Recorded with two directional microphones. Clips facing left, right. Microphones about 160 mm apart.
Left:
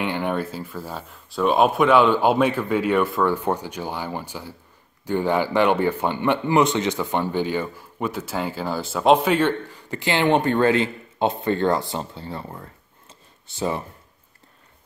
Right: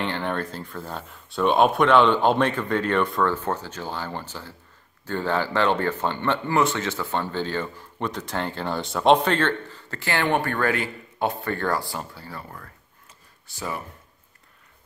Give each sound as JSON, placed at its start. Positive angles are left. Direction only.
{"t": 0.0, "sound": "speech", "side_deg": 10}